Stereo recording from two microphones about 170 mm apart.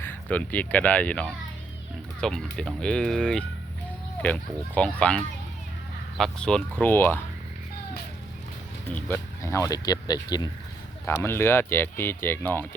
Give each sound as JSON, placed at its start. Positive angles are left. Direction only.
{"t": 0.0, "sound": "speech", "side_deg": 10}
{"t": 8.9, "sound": "speech", "side_deg": 10}